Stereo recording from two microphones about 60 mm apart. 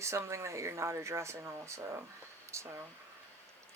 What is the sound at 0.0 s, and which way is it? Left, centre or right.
Speech, right.